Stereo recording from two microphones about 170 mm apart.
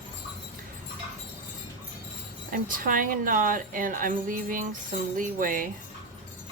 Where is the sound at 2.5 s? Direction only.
55° right (ahead or behind).